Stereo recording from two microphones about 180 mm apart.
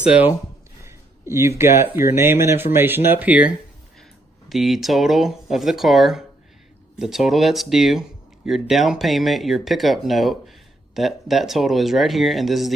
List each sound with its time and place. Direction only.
0.0 s speech: 5° right (ahead or behind)